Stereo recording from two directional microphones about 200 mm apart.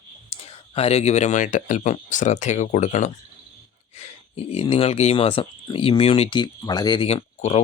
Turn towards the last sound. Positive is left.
turn(degrees=35)  # may be behind; listen again after turning